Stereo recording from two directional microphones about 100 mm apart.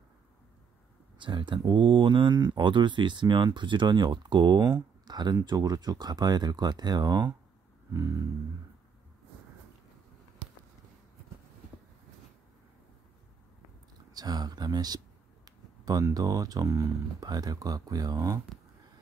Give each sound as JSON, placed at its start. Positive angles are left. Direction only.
{"t": 1.1, "sound": "speech", "side_deg": -50}
{"t": 7.9, "sound": "speech", "side_deg": -30}
{"t": 14.1, "sound": "speech", "side_deg": -40}